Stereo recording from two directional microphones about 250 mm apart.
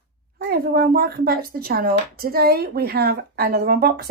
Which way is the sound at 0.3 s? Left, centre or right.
Right.